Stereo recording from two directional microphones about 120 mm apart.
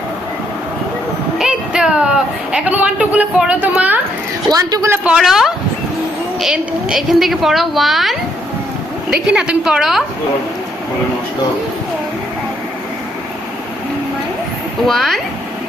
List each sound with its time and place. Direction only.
1.4 s a sound: 5° right (ahead or behind)
4.4 s speech: 35° right (ahead or behind)
4.9 s a woman's voice: 5° right (ahead or behind)
14.8 s a woman's voice: centre (ahead or behind)